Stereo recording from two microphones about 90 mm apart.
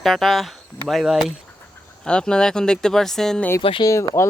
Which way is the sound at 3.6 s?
80° left.